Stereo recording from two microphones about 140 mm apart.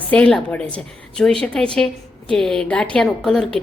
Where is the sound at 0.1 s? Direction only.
5° left (ahead or behind).